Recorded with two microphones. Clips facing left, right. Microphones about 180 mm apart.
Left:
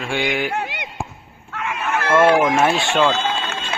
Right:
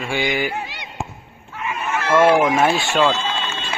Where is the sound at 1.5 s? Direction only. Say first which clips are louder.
Left 1 dB; 75° left (ahead or behind).